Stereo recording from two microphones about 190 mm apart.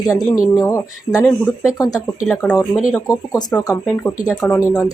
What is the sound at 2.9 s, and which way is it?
Speech, 20° left (ahead or behind).